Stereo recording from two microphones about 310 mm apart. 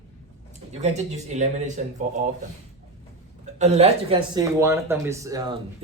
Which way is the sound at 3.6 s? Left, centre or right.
Centre.